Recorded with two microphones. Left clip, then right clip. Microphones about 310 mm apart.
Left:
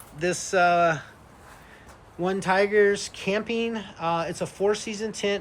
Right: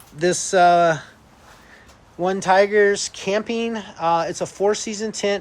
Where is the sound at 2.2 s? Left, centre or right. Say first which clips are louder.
Right 6 dB; centre.